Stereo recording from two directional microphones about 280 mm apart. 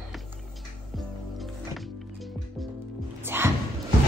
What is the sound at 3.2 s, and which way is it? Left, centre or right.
Music, centre.